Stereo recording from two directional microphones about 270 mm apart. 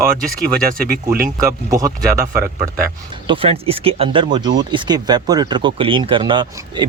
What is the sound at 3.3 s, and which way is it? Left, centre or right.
Speech, centre.